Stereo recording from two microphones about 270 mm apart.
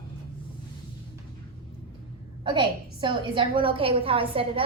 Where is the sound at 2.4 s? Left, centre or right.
Centre.